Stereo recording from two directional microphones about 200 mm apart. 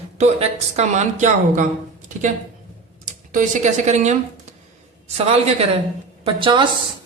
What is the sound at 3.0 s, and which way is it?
Speech, 40° right (ahead or behind).